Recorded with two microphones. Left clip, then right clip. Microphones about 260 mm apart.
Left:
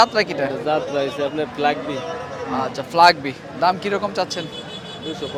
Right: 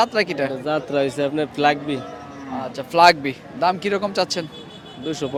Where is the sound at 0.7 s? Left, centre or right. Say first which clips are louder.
Even; right.